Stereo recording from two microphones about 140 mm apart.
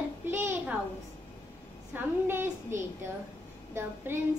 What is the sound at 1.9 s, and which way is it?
A child's voice, 15° right (ahead or behind).